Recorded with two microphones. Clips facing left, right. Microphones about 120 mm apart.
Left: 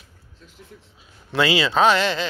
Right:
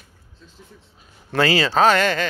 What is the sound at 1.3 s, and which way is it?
Speech, 45° right (ahead or behind).